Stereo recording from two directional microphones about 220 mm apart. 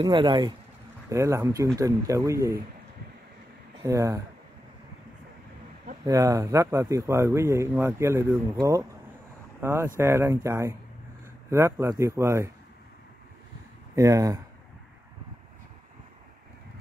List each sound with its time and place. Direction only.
0.0 s speech: 20° right (ahead or behind)
3.8 s speech: 15° right (ahead or behind)
6.0 s speech: 15° right (ahead or behind)
13.9 s speech: 15° right (ahead or behind)